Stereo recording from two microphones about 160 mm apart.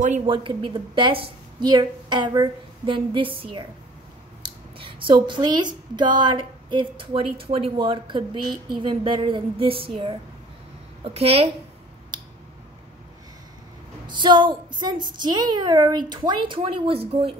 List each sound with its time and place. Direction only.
0.3 s a woman's voice: 30° right (ahead or behind)
11.1 s a woman's voice: 40° right (ahead or behind)
14.0 s a woman's voice: 30° right (ahead or behind)